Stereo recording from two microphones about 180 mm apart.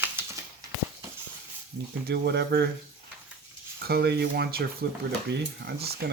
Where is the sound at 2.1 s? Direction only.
70° right (ahead or behind).